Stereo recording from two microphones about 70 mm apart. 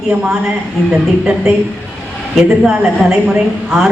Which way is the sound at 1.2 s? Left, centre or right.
Centre.